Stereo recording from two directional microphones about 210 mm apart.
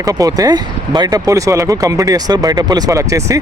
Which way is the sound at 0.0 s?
15° right (ahead or behind).